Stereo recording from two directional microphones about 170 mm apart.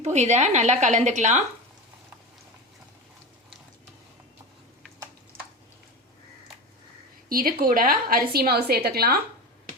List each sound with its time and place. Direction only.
0.0 s a woman's voice: 45° right (ahead or behind)
7.3 s a woman's voice: 60° right (ahead or behind)